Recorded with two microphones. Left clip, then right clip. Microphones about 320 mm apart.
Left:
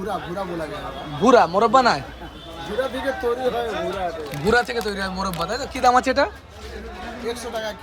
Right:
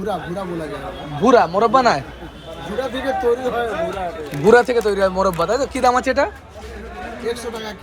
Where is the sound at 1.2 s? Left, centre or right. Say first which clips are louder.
Right 2 dB; centre.